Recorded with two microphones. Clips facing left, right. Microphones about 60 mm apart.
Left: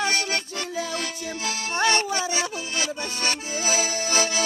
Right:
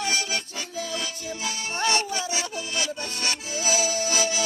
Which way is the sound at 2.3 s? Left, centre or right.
Left.